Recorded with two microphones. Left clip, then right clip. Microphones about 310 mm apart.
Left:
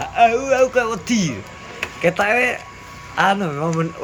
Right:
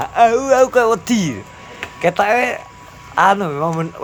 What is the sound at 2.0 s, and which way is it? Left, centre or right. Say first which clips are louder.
A man's voice: right 2 dB; centre.